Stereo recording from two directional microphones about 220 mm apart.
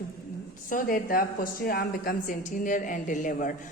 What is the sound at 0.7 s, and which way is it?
A woman's voice, 40° left (ahead or behind).